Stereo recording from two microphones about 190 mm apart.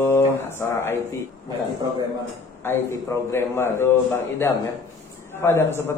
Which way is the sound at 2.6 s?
15° left (ahead or behind).